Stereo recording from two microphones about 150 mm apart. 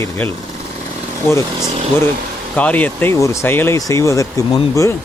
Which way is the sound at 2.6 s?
10° left (ahead or behind).